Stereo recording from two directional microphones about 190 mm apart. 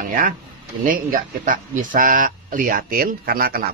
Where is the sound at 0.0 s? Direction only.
45° right (ahead or behind).